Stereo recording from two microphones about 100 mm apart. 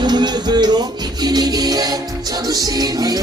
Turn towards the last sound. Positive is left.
turn(degrees=-40)  # may be behind; listen again after turning